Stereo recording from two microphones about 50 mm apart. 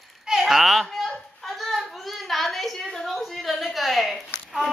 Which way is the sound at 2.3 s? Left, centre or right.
Centre.